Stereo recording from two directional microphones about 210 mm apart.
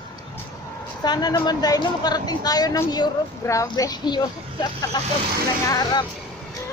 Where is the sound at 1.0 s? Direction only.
20° left (ahead or behind).